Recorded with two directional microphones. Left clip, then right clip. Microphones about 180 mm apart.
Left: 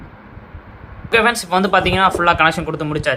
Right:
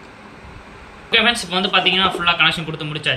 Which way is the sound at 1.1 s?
25° left (ahead or behind).